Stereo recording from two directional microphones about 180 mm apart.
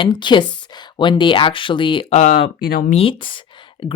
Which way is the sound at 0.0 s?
25° left (ahead or behind).